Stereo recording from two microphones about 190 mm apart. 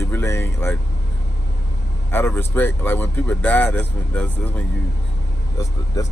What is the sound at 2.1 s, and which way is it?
Speech, 10° left (ahead or behind).